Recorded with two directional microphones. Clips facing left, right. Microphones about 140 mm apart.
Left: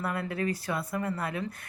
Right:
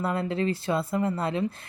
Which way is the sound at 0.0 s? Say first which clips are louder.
Right 4 dB; 25° right (ahead or behind).